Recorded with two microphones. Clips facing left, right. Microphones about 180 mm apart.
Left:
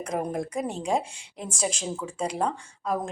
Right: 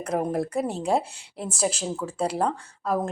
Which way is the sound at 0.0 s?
5° right (ahead or behind).